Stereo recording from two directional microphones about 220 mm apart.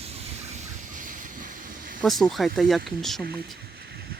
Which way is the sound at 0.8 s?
35° right (ahead or behind).